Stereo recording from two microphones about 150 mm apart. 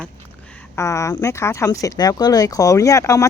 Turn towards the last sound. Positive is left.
turn(degrees=20)  # may be behind; listen again after turning